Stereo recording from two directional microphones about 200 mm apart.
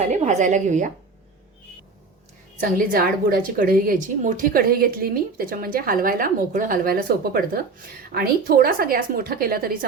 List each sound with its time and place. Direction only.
0.1 s a woman's voice: 35° right (ahead or behind)
2.6 s a woman's voice: 45° right (ahead or behind)